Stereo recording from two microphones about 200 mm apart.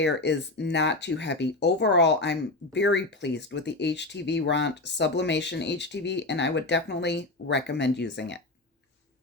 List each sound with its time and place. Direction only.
0.0 s speech: 60° left (ahead or behind)